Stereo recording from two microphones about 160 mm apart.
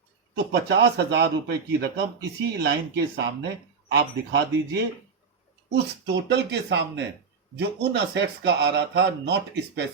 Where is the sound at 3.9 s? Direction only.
90° right.